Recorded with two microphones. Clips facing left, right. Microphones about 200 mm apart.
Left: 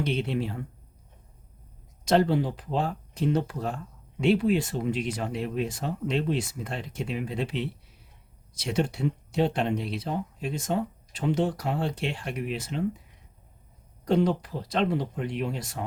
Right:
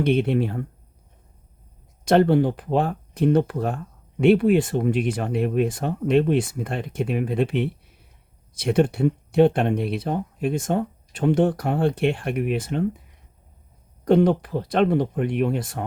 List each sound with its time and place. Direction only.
0.0 s speech: 55° right (ahead or behind)
2.0 s speech: 60° right (ahead or behind)
14.0 s speech: 55° right (ahead or behind)